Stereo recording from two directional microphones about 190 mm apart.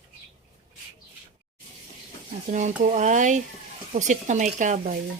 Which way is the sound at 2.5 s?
40° right (ahead or behind).